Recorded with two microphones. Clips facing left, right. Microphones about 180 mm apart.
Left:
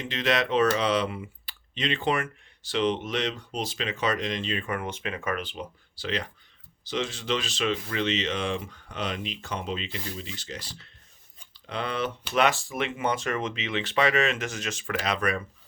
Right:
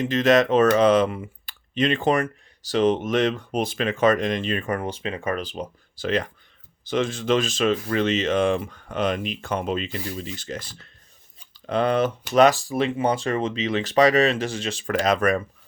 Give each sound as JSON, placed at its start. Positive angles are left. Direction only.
{"t": 0.0, "sound": "speech", "side_deg": -45}